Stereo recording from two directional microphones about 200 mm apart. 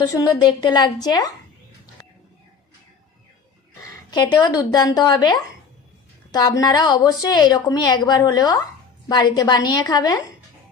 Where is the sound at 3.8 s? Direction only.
20° left (ahead or behind).